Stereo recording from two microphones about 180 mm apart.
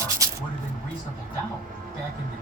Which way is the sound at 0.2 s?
20° right (ahead or behind).